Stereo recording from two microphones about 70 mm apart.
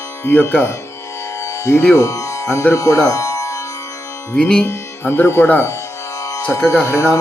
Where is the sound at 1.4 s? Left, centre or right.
Left.